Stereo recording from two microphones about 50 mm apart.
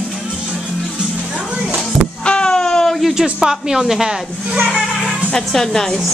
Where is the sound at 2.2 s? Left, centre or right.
Centre.